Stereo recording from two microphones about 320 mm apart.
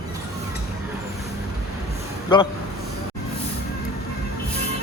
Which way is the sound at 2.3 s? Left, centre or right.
Centre.